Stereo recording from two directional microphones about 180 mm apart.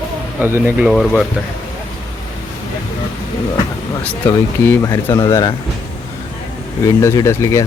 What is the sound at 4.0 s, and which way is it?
Speech, 10° left (ahead or behind).